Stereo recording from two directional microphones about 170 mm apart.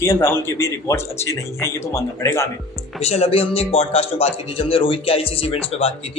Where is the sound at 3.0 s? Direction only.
40° left (ahead or behind).